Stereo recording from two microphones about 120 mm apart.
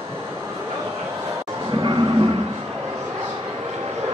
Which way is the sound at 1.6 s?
40° right (ahead or behind).